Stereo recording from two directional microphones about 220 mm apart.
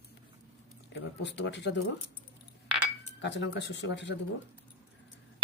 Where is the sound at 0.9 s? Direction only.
55° left (ahead or behind).